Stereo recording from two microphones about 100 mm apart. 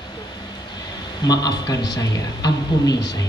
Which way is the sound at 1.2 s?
45° left (ahead or behind).